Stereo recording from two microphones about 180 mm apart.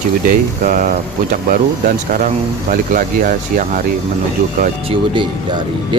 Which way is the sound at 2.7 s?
50° right (ahead or behind).